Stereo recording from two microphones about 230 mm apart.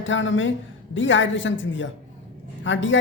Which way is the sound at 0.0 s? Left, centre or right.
Left.